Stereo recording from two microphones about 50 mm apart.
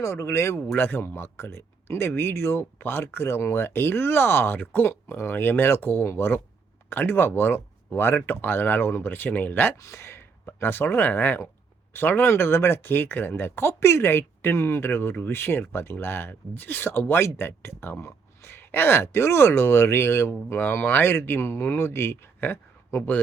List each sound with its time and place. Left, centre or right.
0.0 s speech: left
0.8 s speech: left
4.5 s speech: left
4.9 s speech: left
9.7 s speech: left
10.4 s speech: left
20.5 s speech: left